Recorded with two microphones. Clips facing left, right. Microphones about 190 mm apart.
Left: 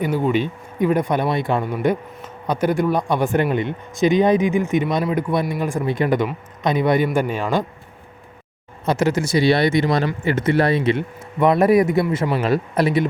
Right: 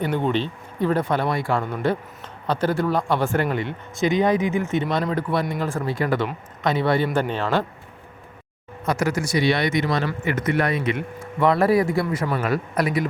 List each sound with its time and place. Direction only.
0.0 s speech: 5° left (ahead or behind)
8.9 s speech: 25° left (ahead or behind)